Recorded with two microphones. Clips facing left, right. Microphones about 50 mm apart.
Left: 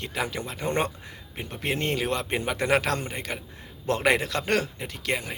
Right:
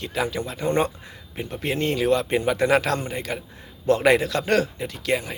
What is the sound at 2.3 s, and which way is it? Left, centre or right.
Speech, left.